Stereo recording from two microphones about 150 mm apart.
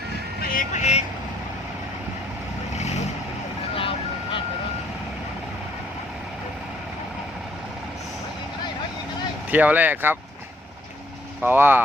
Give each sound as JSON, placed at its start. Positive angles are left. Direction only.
{"t": 0.5, "sound": "vehicle", "side_deg": 50}
{"t": 3.8, "sound": "vehicle", "side_deg": 35}
{"t": 9.5, "sound": "speech", "side_deg": -10}
{"t": 11.4, "sound": "speech", "side_deg": -15}